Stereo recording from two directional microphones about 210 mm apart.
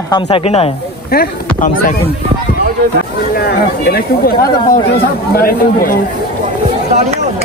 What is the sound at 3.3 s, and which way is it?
Speech, 50° left (ahead or behind).